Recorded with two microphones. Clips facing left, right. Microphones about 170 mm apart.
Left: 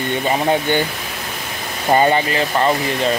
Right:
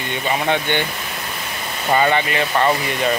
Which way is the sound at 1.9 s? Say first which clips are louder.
Left 3 dB; 30° left (ahead or behind).